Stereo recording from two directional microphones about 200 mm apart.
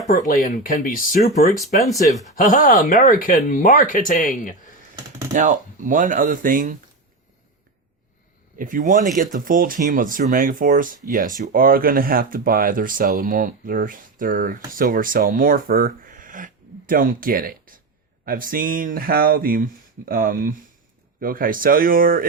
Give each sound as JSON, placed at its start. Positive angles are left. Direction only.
{"t": 0.1, "sound": "speech", "side_deg": 40}
{"t": 1.9, "sound": "speech", "side_deg": 0}
{"t": 2.4, "sound": "speech", "side_deg": 40}
{"t": 5.3, "sound": "speech", "side_deg": -40}
{"t": 8.5, "sound": "speech", "side_deg": -40}
{"t": 16.0, "sound": "a sound", "side_deg": -40}
{"t": 18.3, "sound": "speech", "side_deg": -45}